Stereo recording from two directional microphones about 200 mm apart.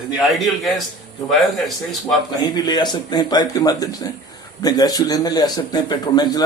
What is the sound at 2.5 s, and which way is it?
A man's voice, 20° left (ahead or behind).